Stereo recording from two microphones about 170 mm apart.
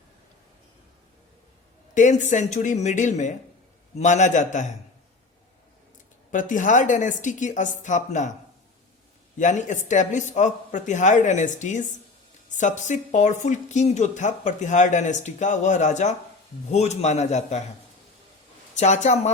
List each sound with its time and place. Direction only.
2.0 s speech: 45° left (ahead or behind)
6.3 s speech: 50° left (ahead or behind)
9.4 s a man's voice: 45° left (ahead or behind)
18.7 s speech: 45° left (ahead or behind)